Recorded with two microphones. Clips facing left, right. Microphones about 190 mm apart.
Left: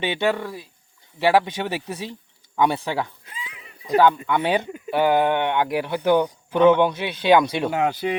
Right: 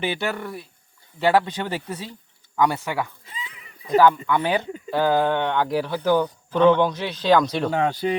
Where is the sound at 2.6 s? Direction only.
25° left (ahead or behind).